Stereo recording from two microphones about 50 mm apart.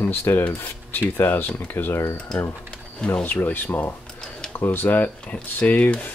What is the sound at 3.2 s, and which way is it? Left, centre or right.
Speech, left.